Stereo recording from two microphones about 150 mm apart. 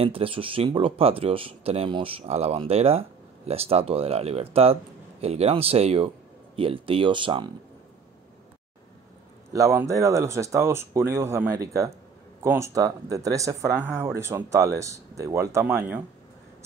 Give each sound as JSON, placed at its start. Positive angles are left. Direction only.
{"t": 0.0, "sound": "speech", "side_deg": -40}
{"t": 9.5, "sound": "speech", "side_deg": -20}